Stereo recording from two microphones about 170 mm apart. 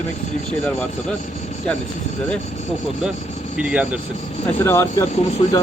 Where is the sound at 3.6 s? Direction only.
5° right (ahead or behind).